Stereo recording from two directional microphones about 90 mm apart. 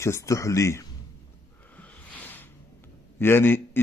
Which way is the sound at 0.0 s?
35° left (ahead or behind).